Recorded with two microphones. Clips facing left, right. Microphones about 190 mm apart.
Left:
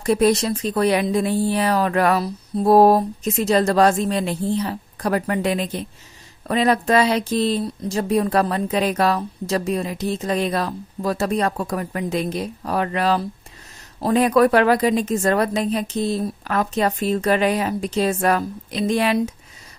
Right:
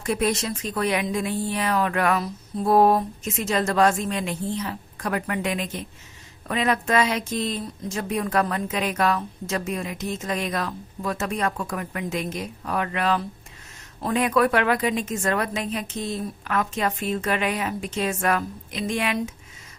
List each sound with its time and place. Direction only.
0.0 s speech: 35° left (ahead or behind)